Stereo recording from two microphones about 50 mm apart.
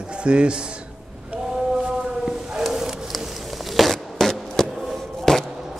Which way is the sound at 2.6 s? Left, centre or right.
Centre.